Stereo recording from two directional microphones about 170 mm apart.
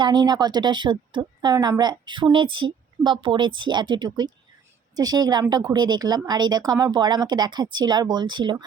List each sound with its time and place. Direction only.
0.0 s speech: 25° right (ahead or behind)